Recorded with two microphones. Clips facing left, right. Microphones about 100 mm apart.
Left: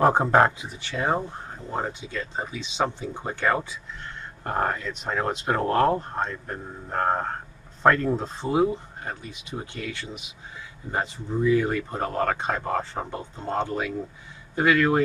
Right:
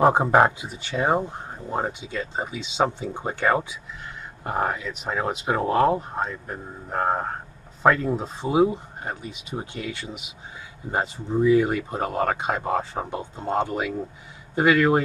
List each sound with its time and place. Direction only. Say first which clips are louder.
0.0 s speech: right 1 dB; 10° right (ahead or behind)